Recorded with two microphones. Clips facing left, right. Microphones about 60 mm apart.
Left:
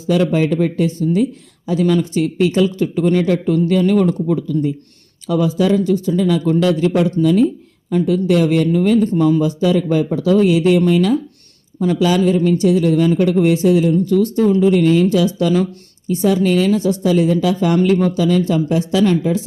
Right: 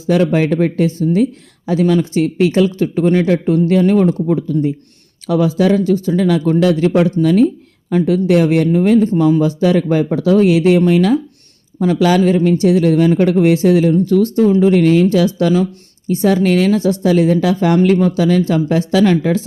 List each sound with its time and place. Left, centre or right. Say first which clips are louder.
0.1 s speech: right 2 dB; right
5.5 s speech: right 2 dB; right
6.9 s speech: right 2 dB; right